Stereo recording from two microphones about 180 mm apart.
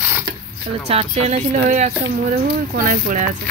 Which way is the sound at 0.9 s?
35° right (ahead or behind).